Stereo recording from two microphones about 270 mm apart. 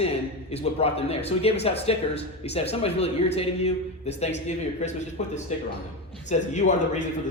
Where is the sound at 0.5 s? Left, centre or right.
Left.